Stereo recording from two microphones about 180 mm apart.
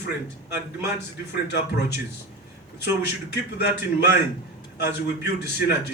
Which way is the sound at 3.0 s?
70° left (ahead or behind).